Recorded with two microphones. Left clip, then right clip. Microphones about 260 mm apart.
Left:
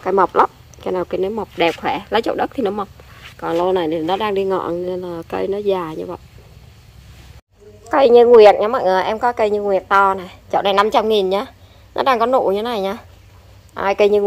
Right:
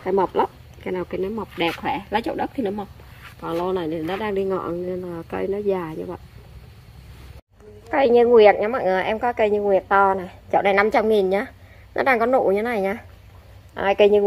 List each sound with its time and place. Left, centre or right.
0.0 s a woman's voice: centre
7.9 s a woman's voice: centre
12.3 s speech: centre
12.7 s a woman's voice: centre